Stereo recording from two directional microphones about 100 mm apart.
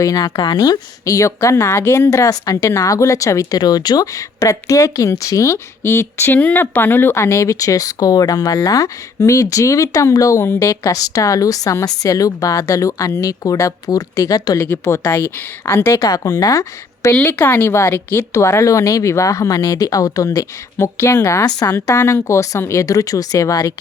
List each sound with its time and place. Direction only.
0.0 s a woman's voice: 35° left (ahead or behind)
14.7 s a woman's voice: 25° left (ahead or behind)
16.0 s a woman's voice: 35° left (ahead or behind)
17.2 s a woman's voice: 20° left (ahead or behind); by 23.7 s 35° left (ahead or behind)